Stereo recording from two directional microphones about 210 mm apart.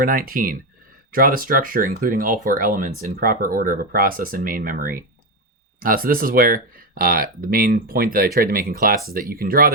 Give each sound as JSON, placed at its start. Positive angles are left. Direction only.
{"t": 0.0, "sound": "speech", "side_deg": -45}